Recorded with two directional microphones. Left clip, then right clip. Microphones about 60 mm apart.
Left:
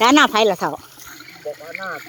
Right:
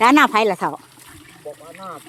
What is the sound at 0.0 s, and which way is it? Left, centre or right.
Speech, left.